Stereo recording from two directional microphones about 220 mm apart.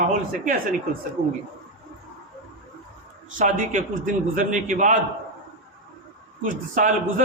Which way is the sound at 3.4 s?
35° right (ahead or behind).